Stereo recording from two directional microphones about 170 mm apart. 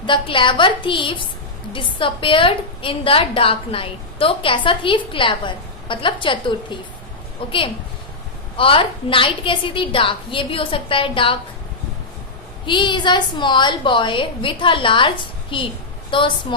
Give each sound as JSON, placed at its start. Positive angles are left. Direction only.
{"t": 0.0, "sound": "a woman's voice", "side_deg": 30}
{"t": 8.5, "sound": "a woman's voice", "side_deg": 30}
{"t": 12.6, "sound": "a woman's voice", "side_deg": 30}